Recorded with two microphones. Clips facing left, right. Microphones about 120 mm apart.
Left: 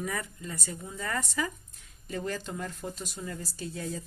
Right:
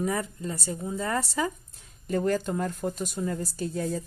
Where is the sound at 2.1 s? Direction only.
45° right (ahead or behind).